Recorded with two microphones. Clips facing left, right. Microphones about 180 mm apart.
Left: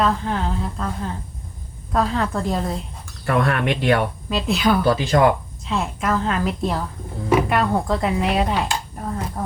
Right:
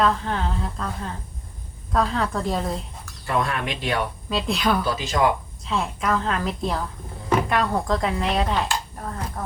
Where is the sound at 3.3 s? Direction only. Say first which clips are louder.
Left 5 dB; 60° left (ahead or behind).